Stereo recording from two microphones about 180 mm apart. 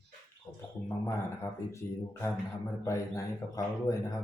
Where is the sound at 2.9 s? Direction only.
15° left (ahead or behind).